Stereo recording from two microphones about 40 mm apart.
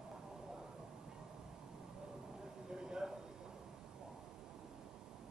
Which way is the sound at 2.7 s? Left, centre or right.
Centre.